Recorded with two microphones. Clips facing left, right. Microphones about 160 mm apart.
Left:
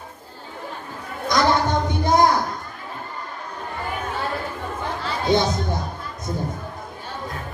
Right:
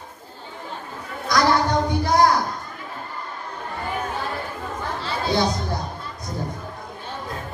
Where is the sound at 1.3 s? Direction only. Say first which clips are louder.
Even; 20° left (ahead or behind).